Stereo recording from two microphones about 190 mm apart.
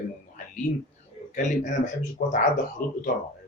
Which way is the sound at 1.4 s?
40° left (ahead or behind).